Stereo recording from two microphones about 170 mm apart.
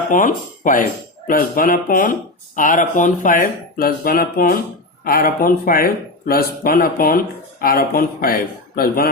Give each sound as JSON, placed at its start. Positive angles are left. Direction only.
{"t": 0.1, "sound": "speech", "side_deg": 50}